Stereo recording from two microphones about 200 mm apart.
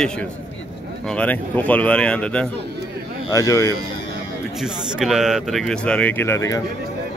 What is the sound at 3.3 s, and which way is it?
Speech, 15° left (ahead or behind).